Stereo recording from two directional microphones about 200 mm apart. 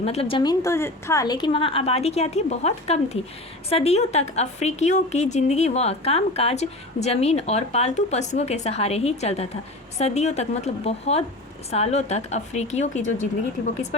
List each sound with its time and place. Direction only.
0.0 s a woman's voice: 30° left (ahead or behind)